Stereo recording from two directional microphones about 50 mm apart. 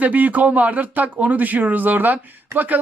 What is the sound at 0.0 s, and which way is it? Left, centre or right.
Speech, right.